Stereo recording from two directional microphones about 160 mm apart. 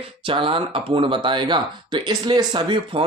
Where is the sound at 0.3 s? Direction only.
35° right (ahead or behind).